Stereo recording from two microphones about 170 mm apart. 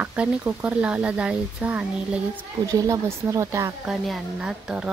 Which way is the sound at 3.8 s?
Centre (ahead or behind).